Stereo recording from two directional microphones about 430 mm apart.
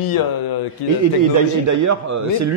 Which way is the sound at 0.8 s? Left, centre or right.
Right.